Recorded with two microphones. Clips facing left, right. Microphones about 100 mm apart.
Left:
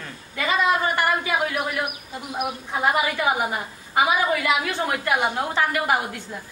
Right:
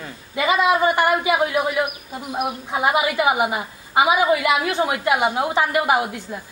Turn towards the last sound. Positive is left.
turn(degrees=-15)  # may be behind; listen again after turning